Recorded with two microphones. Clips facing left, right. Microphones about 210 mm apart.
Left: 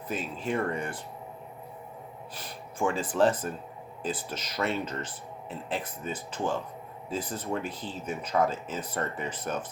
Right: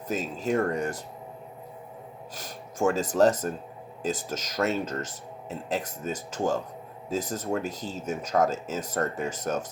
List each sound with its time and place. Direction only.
0.1 s speech: 40° right (ahead or behind)
2.3 s speech: 45° right (ahead or behind)